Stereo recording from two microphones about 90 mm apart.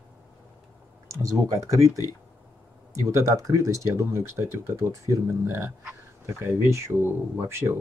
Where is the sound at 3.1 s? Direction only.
35° right (ahead or behind).